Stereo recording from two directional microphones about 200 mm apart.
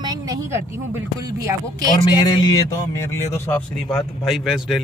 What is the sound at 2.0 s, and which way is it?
Speech, 20° left (ahead or behind).